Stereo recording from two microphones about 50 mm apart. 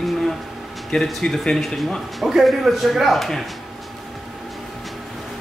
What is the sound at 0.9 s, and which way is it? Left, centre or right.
Speech, centre.